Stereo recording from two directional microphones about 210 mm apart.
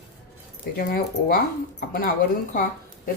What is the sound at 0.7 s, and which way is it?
Speech, 45° left (ahead or behind).